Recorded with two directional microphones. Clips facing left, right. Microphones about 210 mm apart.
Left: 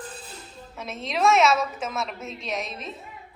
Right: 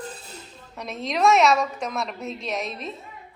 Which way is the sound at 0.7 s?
Centre (ahead or behind).